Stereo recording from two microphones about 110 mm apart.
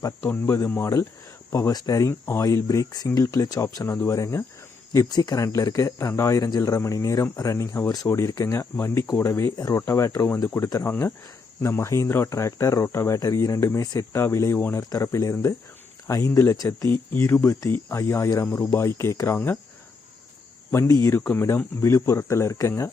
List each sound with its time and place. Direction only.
0.2 s speech: 15° left (ahead or behind)
20.7 s speech: 25° left (ahead or behind)